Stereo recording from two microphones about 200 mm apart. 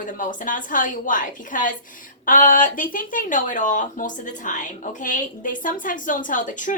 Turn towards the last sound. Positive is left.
turn(degrees=40)  # may be behind; listen again after turning